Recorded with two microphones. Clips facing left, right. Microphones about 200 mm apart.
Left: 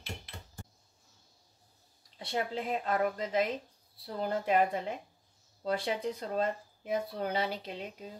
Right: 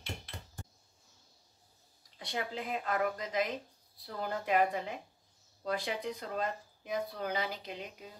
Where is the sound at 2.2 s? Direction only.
30° left (ahead or behind).